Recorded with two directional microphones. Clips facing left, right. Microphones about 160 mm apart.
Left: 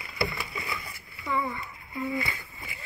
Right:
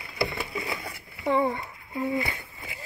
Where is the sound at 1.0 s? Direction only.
35° right (ahead or behind).